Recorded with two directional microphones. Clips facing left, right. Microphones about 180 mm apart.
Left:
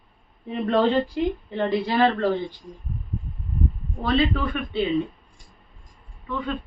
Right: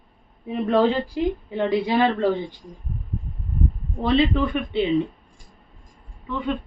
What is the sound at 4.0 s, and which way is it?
Speech, 20° right (ahead or behind).